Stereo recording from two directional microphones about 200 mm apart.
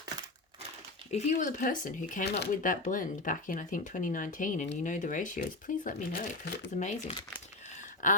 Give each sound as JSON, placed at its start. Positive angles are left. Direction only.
{"t": 1.1, "sound": "speech", "side_deg": 40}
{"t": 6.7, "sound": "speech", "side_deg": 30}